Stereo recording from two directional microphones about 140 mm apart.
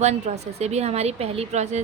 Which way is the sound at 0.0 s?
55° right (ahead or behind).